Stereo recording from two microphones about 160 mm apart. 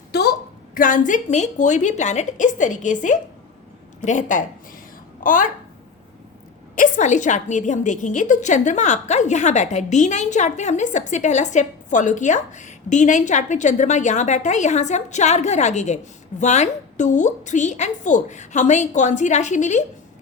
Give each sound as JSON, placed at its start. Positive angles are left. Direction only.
{"t": 0.1, "sound": "a woman's voice", "side_deg": 90}
{"t": 6.7, "sound": "a woman's voice", "side_deg": 55}